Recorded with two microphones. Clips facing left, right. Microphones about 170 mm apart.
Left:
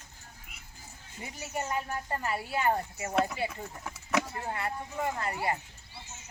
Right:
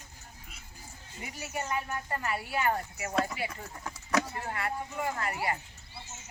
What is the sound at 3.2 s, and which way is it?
Speech, centre (ahead or behind).